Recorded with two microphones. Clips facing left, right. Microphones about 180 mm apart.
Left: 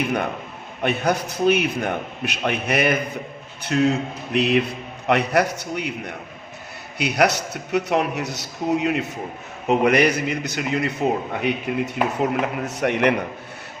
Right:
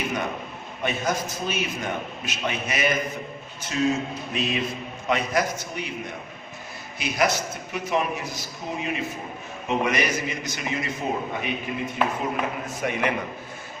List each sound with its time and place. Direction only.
0.8 s a man's voice: 60° left (ahead or behind)